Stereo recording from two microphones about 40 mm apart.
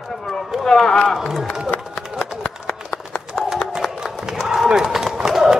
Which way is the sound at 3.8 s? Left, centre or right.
Centre.